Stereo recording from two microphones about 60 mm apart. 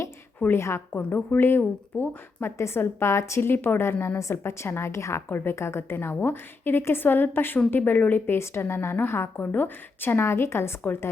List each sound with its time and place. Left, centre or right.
0.5 s a woman's voice: left
0.9 s a woman's voice: left
1.4 s a woman's voice: left
4.2 s a woman's voice: left
5.3 s a woman's voice: left
5.5 s a woman's voice: left
7.8 s a woman's voice: left
8.3 s a woman's voice: left
9.4 s a woman's voice: left